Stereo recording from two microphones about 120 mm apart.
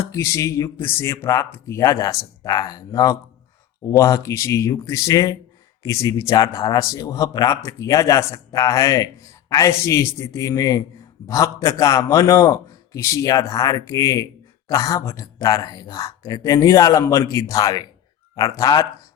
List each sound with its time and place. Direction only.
0.0 s speech: 25° left (ahead or behind)